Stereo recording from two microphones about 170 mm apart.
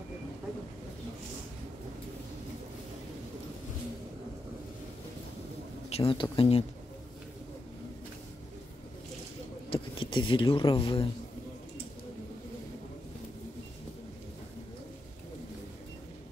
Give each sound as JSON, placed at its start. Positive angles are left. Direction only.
{"t": 5.9, "sound": "speech", "side_deg": 35}
{"t": 9.7, "sound": "speech", "side_deg": 30}